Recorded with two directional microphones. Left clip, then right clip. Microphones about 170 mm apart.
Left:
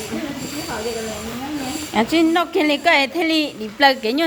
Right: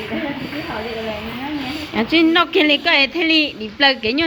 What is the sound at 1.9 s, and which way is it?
A woman's voice, 20° left (ahead or behind).